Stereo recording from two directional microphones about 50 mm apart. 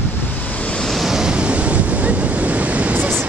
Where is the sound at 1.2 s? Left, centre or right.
Right.